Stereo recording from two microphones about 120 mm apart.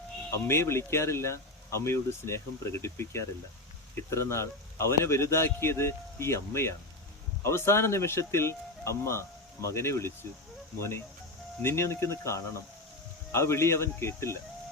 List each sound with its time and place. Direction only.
0.4 s speech: 20° left (ahead or behind)